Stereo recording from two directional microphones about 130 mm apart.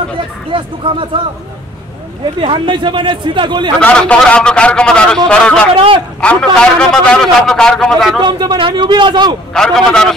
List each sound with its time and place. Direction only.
0.5 s speech: 40° right (ahead or behind)
2.4 s speech: 40° right (ahead or behind)
3.8 s a man's voice: 10° left (ahead or behind)
8.2 s speech: 35° right (ahead or behind)
9.5 s a man's voice: 5° left (ahead or behind)